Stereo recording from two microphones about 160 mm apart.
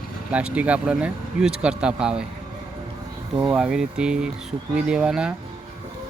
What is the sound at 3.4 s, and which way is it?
Speech, 10° right (ahead or behind).